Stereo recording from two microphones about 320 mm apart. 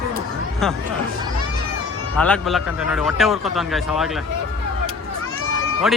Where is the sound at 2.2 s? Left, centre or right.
Centre.